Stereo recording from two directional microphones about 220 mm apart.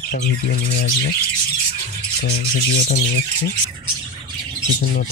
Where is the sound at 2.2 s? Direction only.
50° left (ahead or behind).